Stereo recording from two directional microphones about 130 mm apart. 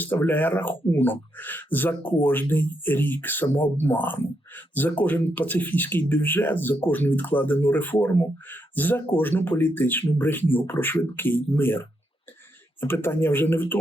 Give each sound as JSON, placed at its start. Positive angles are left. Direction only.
{"t": 0.0, "sound": "speech", "side_deg": 15}